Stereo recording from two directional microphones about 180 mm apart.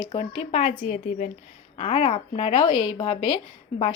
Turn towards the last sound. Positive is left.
turn(degrees=30)  # may be behind; listen again after turning